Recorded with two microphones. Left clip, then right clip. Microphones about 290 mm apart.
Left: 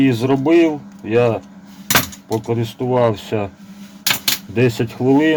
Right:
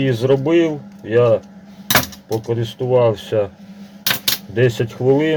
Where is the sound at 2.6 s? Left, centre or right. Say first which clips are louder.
Right 2 dB; left.